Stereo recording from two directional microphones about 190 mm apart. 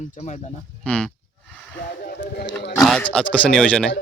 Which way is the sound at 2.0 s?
50° left (ahead or behind).